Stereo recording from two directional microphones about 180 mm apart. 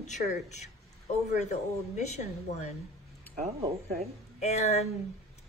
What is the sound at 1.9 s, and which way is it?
Speech, 40° left (ahead or behind).